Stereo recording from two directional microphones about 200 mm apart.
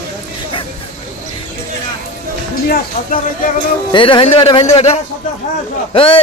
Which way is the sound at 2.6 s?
45° left (ahead or behind).